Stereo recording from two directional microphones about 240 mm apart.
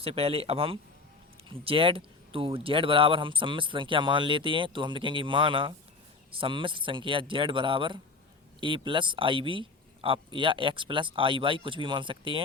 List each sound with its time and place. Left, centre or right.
0.0 s speech: right